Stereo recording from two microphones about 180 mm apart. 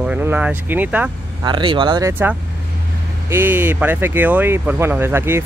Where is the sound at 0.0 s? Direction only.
10° right (ahead or behind).